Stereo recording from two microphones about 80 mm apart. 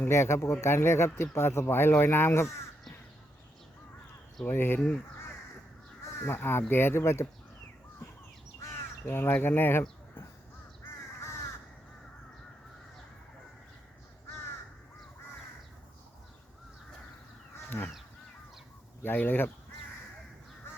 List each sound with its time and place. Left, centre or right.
0.0 s speech: left
4.4 s speech: left
4.8 s speech: centre
6.1 s speech: left
8.6 s speech: left
11.2 s crow: left
17.7 s goose: left
19.0 s speech: left